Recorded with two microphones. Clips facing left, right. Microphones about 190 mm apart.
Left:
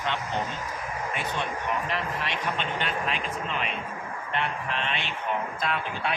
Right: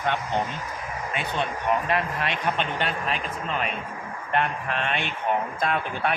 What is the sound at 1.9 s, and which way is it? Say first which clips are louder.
Speech: right 4 dB; 55° right (ahead or behind).